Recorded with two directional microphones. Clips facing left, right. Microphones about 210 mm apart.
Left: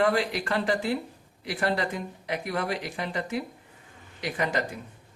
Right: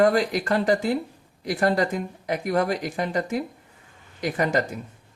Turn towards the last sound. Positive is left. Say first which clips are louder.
# right 5 dB
turn(degrees=-45)  # may be behind; listen again after turning